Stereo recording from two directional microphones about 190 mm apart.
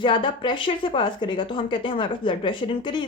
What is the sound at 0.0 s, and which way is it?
Speech, 25° left (ahead or behind).